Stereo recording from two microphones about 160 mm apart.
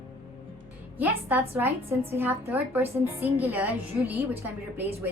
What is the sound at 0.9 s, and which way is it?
A woman's voice, 10° right (ahead or behind).